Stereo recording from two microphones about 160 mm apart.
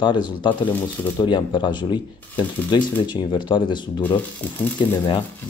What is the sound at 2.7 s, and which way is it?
Speech, 30° left (ahead or behind).